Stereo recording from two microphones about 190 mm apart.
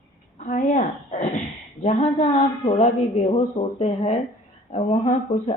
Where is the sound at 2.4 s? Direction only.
30° left (ahead or behind).